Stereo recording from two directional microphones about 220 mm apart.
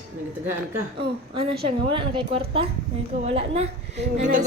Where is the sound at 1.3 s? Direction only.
25° right (ahead or behind).